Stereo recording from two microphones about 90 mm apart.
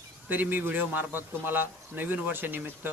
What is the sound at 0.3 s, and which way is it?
A man's voice, 20° right (ahead or behind).